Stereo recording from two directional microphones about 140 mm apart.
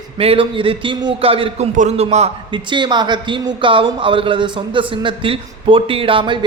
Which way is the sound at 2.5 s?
35° right (ahead or behind).